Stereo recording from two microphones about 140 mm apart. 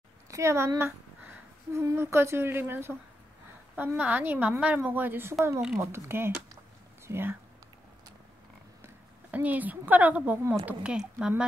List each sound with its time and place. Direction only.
0.3 s a woman's voice: 20° right (ahead or behind)
8.8 s a woman's voice: 10° right (ahead or behind)